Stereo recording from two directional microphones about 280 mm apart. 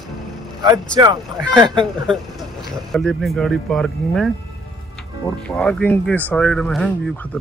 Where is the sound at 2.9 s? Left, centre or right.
Centre.